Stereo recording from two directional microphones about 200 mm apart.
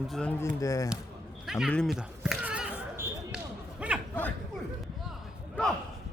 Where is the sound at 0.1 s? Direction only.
5° left (ahead or behind).